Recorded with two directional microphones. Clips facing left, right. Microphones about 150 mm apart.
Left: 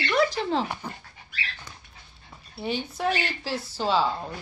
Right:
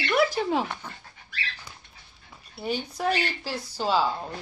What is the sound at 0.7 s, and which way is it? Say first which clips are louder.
Speech: left 3 dB; 10° left (ahead or behind).